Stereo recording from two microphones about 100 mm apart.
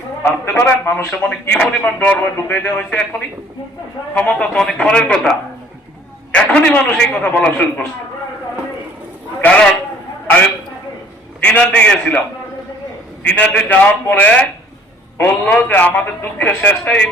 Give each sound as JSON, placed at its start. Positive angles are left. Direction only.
{"t": 0.2, "sound": "a man's voice", "side_deg": 25}
{"t": 9.4, "sound": "a man's voice", "side_deg": 10}
{"t": 11.4, "sound": "a man's voice", "side_deg": 15}
{"t": 13.2, "sound": "a man's voice", "side_deg": 15}